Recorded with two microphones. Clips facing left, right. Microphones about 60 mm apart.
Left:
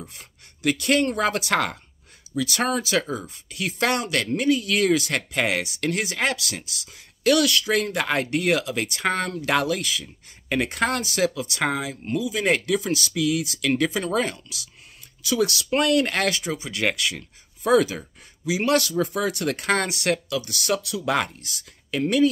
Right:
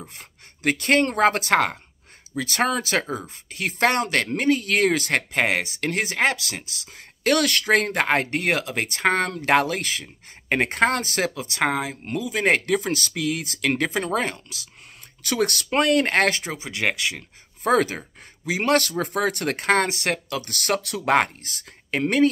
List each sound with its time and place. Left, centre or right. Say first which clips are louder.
0.1 s speech: right 2 dB; right
15.2 s speech: left 1 dB; right
17.6 s speech: left 1 dB; right